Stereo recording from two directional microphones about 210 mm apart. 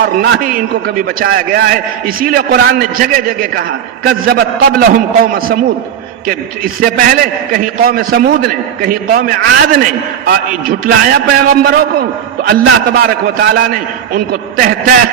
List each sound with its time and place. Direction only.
0.0 s a man's voice: 45° right (ahead or behind)
6.7 s a man's voice: 45° right (ahead or behind)